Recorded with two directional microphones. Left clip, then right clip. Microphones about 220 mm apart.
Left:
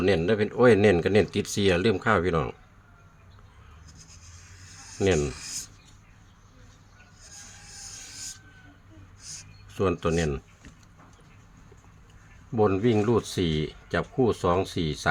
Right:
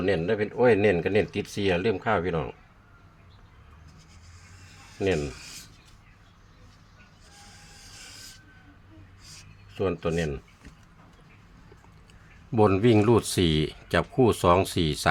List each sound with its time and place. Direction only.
0.0 s speech: 35° left (ahead or behind)
5.0 s speech: 35° left (ahead or behind)
5.4 s a sound: 15° left (ahead or behind)
9.7 s speech: 30° left (ahead or behind)
12.5 s speech: 15° right (ahead or behind)